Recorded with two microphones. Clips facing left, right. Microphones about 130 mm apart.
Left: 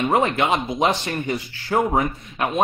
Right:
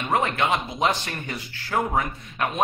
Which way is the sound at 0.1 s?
20° left (ahead or behind).